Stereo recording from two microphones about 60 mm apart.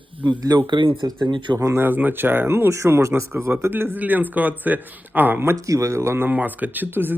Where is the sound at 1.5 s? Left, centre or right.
Right.